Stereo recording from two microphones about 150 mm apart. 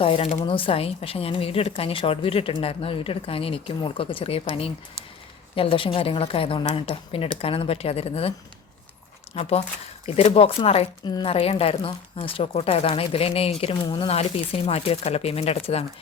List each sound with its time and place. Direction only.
0.0 s speech: 40° left (ahead or behind)
9.3 s speech: 45° left (ahead or behind)